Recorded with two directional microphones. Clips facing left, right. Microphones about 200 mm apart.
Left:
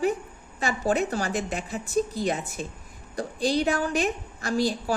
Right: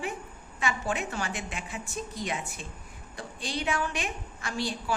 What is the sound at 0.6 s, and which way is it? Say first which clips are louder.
A woman's voice: left 6 dB; 40° left (ahead or behind).